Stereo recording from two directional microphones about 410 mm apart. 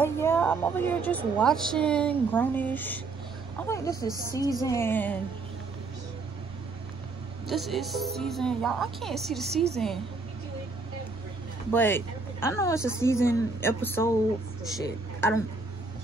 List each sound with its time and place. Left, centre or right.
0.0 s a woman's voice: centre
7.4 s a woman's voice: centre
11.7 s a woman's voice: centre